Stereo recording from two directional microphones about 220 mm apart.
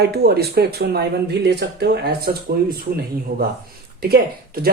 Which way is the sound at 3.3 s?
45° right (ahead or behind).